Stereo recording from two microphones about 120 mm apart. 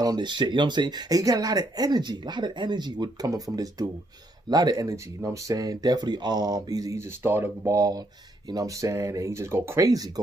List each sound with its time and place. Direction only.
0.0 s speech: 35° right (ahead or behind)